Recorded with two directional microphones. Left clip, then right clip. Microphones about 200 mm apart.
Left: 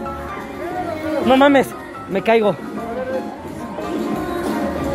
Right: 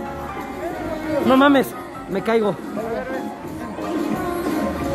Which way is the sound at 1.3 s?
5° right (ahead or behind).